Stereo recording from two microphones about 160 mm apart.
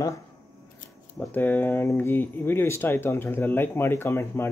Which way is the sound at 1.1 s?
10° left (ahead or behind).